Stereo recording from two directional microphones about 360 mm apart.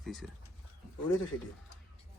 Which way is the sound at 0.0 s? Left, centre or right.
Centre.